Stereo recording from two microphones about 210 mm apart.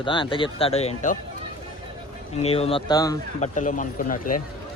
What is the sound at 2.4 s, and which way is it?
Speech, 30° left (ahead or behind).